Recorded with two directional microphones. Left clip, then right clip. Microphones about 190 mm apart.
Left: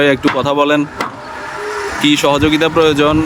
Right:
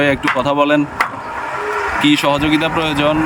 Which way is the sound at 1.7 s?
40° right (ahead or behind).